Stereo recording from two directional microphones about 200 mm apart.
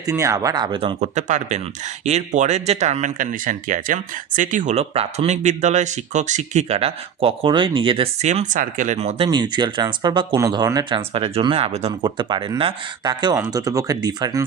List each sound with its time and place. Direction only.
0.0 s speech: 15° right (ahead or behind)